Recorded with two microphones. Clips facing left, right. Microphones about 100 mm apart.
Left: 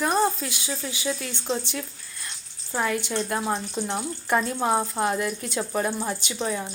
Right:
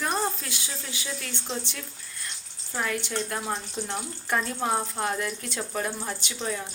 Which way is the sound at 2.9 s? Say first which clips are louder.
Left 3 dB; 20° left (ahead or behind).